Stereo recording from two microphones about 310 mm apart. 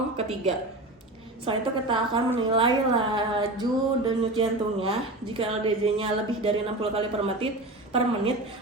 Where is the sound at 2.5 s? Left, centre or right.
Centre.